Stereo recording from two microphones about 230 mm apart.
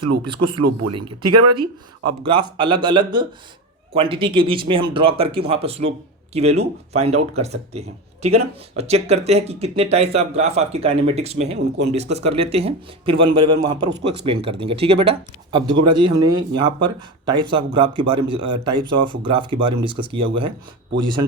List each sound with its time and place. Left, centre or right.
0.0 s speech: right
2.2 s speech: right